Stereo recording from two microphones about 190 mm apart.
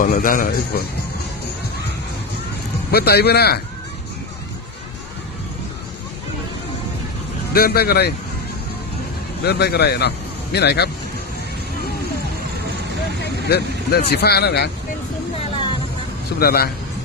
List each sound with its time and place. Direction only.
0.0 s a man's voice: 45° left (ahead or behind)
2.9 s a man's voice: 55° left (ahead or behind)
7.5 s a man's voice: 55° left (ahead or behind)
9.4 s a man's voice: 60° left (ahead or behind)
13.2 s vehicle: 60° left (ahead or behind)
14.1 s a man's voice: 60° left (ahead or behind)
16.4 s a man's voice: 55° left (ahead or behind)